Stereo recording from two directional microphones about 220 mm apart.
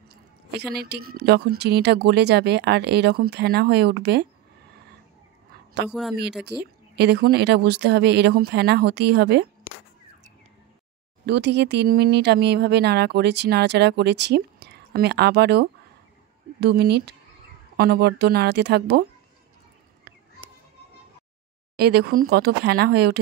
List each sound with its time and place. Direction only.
0.5 s speech: 50° right (ahead or behind)
5.9 s speech: centre (ahead or behind)
6.4 s speech: 50° right (ahead or behind)
11.2 s speech: 50° right (ahead or behind)
20.1 s a sound: 50° right (ahead or behind)
21.7 s speech: 45° right (ahead or behind)